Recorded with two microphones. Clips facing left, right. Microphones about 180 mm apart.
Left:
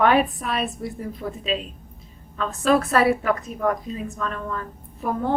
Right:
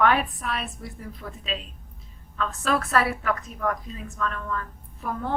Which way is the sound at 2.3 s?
10° left (ahead or behind).